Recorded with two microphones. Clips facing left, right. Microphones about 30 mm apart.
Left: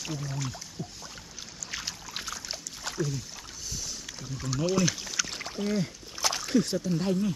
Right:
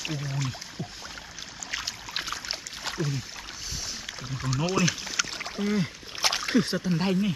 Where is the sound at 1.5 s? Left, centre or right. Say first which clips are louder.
Right 3 dB; centre.